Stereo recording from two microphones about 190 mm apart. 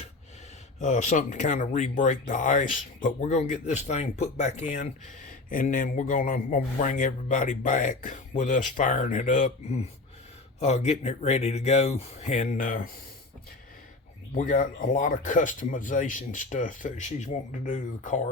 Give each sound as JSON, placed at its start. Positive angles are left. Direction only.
{"t": 0.8, "sound": "a man's voice", "side_deg": 40}
{"t": 14.3, "sound": "speech", "side_deg": 45}